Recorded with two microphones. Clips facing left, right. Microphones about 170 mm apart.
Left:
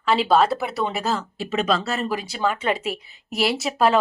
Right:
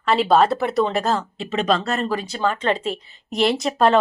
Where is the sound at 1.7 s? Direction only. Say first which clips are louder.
Right 2 dB; 5° left (ahead or behind).